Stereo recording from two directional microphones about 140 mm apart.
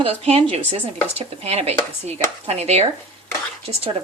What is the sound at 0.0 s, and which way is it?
Speech, 45° right (ahead or behind).